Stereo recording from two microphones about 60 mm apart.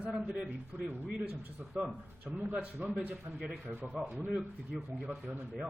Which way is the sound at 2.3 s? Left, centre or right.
Right.